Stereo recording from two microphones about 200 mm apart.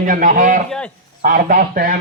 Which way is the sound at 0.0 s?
45° right (ahead or behind).